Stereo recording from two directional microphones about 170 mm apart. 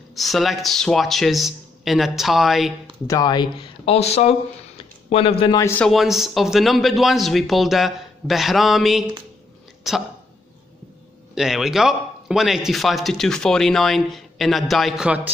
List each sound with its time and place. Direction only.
0.1 s speech: centre (ahead or behind)
3.1 s speech: 25° left (ahead or behind)
5.6 s a man's voice: 15° left (ahead or behind)
5.9 s speech: centre (ahead or behind)
11.3 s speech: 5° right (ahead or behind)